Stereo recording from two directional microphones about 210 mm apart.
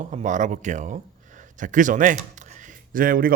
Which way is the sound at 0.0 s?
35° right (ahead or behind).